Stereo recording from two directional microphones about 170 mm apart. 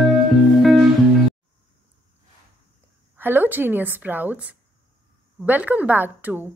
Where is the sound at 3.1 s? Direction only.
10° right (ahead or behind).